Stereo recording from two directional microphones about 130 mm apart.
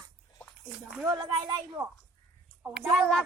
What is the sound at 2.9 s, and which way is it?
Speech, 5° left (ahead or behind).